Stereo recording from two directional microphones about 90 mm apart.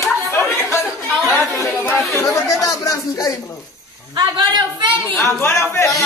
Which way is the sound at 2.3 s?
35° left (ahead or behind).